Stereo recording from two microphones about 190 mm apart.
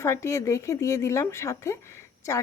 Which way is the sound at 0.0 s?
15° left (ahead or behind).